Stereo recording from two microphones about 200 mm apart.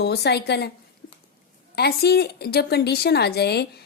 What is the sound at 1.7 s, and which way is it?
A woman's voice, 55° left (ahead or behind).